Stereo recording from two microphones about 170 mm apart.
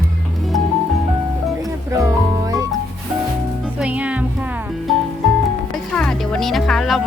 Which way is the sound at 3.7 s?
5° right (ahead or behind).